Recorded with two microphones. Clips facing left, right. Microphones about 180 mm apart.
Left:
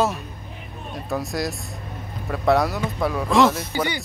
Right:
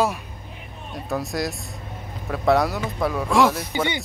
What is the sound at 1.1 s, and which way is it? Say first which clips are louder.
Speech: even; centre (ahead or behind).